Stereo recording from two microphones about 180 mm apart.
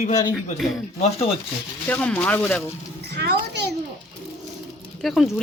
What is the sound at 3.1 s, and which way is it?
Speech, 65° right (ahead or behind).